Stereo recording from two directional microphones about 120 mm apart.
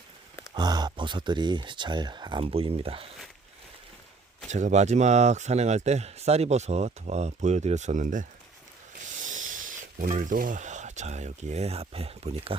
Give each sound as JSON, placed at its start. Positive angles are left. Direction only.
{"t": 0.5, "sound": "speech", "side_deg": -35}
{"t": 4.4, "sound": "speech", "side_deg": -80}
{"t": 9.0, "sound": "snort", "side_deg": -90}
{"t": 10.0, "sound": "speech", "side_deg": -90}